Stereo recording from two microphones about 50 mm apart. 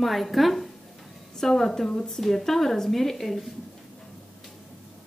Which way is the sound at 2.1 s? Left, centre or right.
Centre.